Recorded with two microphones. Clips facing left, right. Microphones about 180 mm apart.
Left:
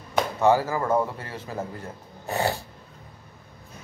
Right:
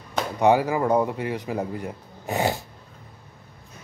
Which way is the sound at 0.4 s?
15° right (ahead or behind).